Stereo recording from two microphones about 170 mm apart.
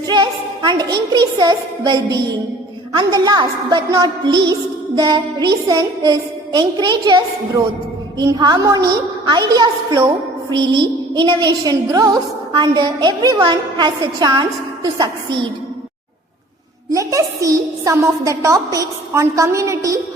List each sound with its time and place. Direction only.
0.1 s a sound: 25° right (ahead or behind)
1.1 s a woman's voice: 25° right (ahead or behind)
16.9 s a woman's voice: 20° right (ahead or behind)